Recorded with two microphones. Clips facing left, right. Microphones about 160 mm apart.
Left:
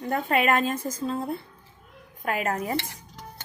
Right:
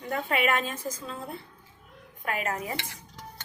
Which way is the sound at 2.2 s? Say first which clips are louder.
Left 4 dB; 40° left (ahead or behind).